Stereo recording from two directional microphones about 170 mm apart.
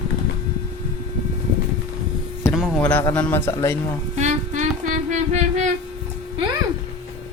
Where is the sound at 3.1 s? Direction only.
10° left (ahead or behind).